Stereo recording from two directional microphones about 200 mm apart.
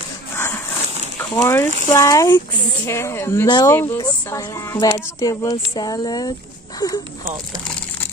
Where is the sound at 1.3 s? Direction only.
15° left (ahead or behind).